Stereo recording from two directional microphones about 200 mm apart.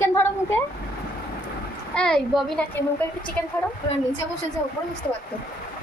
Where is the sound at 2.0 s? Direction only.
5° left (ahead or behind).